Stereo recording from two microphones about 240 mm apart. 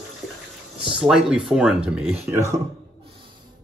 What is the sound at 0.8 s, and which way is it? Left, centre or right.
Speech, centre.